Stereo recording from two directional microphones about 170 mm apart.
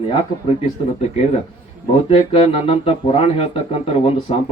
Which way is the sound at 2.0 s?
35° left (ahead or behind).